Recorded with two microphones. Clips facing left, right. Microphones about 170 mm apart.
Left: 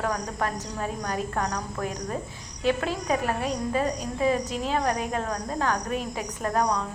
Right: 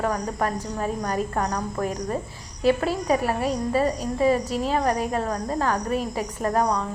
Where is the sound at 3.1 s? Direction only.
5° right (ahead or behind).